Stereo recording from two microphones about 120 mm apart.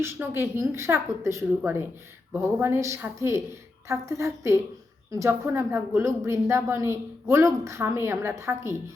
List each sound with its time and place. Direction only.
0.0 s a woman's voice: 20° right (ahead or behind)